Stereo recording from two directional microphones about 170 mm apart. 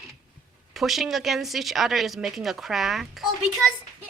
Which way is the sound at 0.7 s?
Centre (ahead or behind).